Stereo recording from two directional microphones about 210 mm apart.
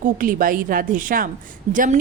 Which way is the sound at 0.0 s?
40° right (ahead or behind).